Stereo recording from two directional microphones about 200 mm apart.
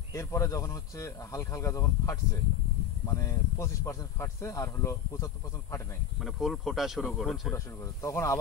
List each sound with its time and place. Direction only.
0.1 s speech: 15° left (ahead or behind)
6.2 s speech: centre (ahead or behind)
7.5 s speech: 15° left (ahead or behind)